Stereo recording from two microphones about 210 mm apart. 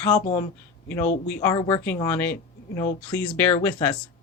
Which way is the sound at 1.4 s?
15° left (ahead or behind).